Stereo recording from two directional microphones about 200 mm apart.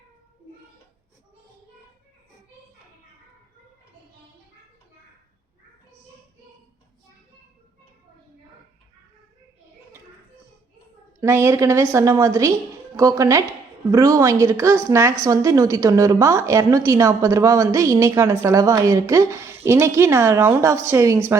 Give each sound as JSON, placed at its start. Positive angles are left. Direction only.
{"t": 11.2, "sound": "a woman's voice", "side_deg": -10}